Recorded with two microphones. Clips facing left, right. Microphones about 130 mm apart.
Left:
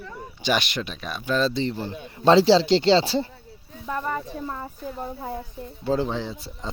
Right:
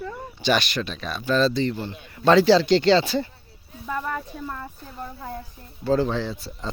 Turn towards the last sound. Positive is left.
turn(degrees=20)  # may be behind; listen again after turning